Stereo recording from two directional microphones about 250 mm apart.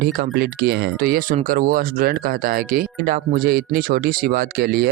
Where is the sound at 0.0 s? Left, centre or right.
Right.